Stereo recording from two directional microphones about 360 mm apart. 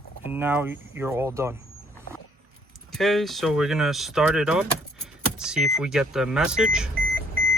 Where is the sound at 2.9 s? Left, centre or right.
Centre.